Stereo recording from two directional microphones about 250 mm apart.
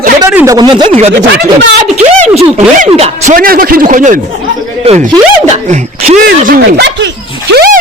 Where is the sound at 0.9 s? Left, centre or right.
Right.